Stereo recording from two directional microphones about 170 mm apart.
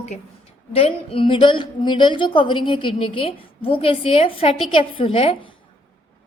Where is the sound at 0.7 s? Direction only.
35° left (ahead or behind).